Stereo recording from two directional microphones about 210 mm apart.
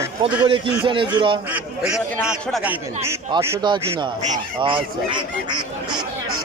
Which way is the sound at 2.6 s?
10° right (ahead or behind).